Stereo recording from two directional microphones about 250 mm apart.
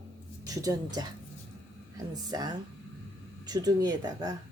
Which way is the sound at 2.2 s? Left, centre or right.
Centre.